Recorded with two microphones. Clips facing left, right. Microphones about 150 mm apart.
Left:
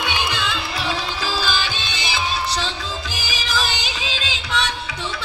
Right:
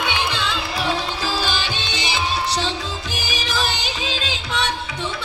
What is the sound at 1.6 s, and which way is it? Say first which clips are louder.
Music: right 1 dB; 70° right (ahead or behind).